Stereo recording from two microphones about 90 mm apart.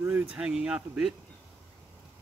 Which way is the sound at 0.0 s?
25° right (ahead or behind).